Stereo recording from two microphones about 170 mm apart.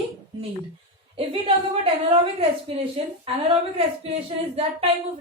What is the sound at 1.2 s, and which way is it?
A woman's voice, 35° right (ahead or behind).